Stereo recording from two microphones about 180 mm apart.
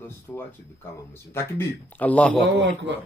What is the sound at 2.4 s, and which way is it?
Speech, 90° right.